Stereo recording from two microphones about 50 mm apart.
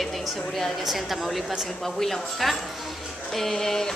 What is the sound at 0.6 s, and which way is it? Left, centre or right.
Speech, centre.